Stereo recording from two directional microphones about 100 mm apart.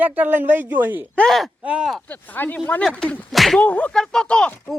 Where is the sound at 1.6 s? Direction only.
10° right (ahead or behind).